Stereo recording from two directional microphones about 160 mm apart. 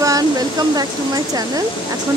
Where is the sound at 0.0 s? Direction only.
25° right (ahead or behind).